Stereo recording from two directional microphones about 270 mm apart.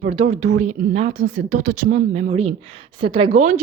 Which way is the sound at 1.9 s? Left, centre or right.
Right.